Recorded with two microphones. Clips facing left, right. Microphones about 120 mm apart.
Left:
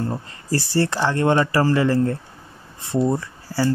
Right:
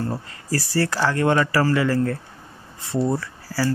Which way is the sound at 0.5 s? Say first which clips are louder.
Left 2 dB; 25° left (ahead or behind).